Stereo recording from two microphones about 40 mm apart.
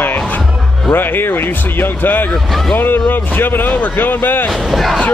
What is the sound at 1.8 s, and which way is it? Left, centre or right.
Speech, left.